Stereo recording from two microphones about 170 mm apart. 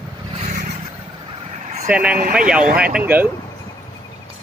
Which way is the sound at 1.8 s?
10° right (ahead or behind).